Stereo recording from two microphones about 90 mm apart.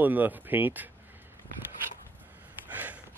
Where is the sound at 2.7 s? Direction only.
20° right (ahead or behind).